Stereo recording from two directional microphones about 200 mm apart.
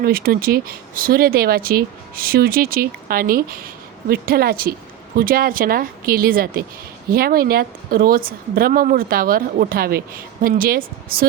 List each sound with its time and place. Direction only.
0.0 s a woman's voice: 50° right (ahead or behind)